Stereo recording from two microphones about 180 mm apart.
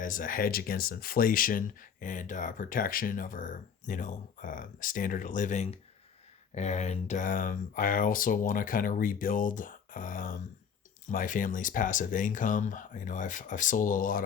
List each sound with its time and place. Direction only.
0.0 s speech: 50° left (ahead or behind)